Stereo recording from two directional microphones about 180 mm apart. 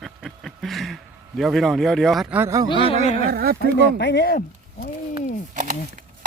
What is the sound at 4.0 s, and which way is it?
Speech, 75° left (ahead or behind).